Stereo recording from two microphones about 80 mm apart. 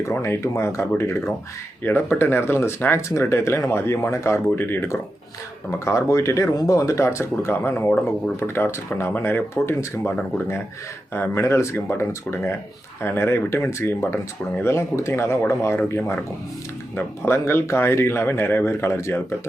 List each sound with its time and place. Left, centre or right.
0.1 s speech: left
11.1 s speech: left
16.9 s speech: left